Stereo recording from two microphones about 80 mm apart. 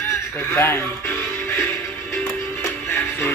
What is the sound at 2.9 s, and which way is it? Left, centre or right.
Music, left.